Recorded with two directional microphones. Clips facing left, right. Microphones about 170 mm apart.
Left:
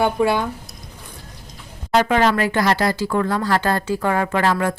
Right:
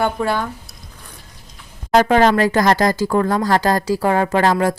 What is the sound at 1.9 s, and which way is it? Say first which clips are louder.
Speech: right 4 dB; 40° right (ahead or behind).